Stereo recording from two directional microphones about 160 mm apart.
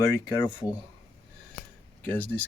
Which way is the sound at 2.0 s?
10° left (ahead or behind).